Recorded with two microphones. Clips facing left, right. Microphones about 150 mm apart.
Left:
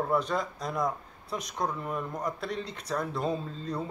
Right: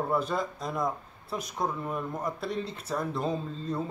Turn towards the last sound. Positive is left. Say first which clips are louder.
# right 2 dB
turn(degrees=0)  # may be behind; listen again after turning